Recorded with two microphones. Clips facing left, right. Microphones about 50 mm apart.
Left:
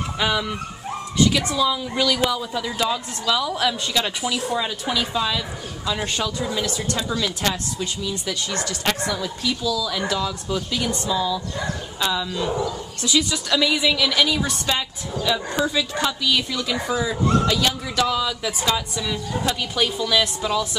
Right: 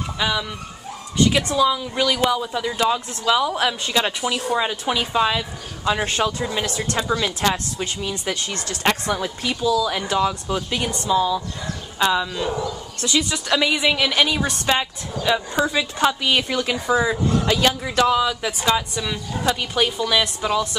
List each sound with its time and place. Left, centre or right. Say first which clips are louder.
0.2 s speech: left 1 dB; centre
1.6 s a woman's voice: right 3 dB; centre
4.6 s a woman's voice: right 2 dB; right
7.1 s a woman's voice: right 4 dB; right
7.5 s a woman's voice: right 1 dB; right; by 13.4 s centre
13.5 s a woman's voice: right 2 dB; right